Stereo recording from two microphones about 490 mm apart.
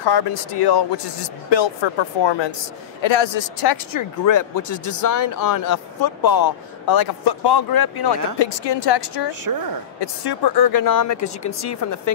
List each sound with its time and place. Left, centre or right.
0.0 s speech: left
3.7 s speech: left
8.4 s speech: left